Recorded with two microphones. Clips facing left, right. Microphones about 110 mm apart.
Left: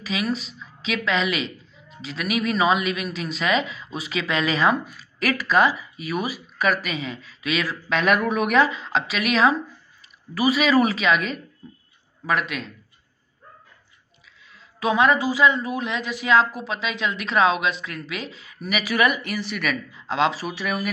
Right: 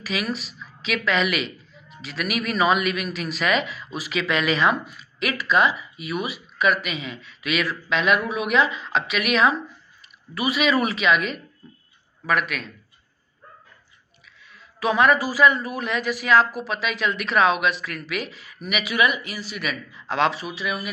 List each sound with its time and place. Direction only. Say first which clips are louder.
0.0 s a woman's voice: left 2 dB; 30° left (ahead or behind)
14.5 s speech: even; 25° left (ahead or behind); by 19.8 s 50° left (ahead or behind)
20.1 s speech: even; 25° left (ahead or behind)
20.4 s speech: left 2 dB; 45° left (ahead or behind)